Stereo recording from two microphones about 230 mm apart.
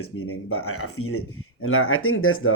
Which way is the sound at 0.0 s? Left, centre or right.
Left.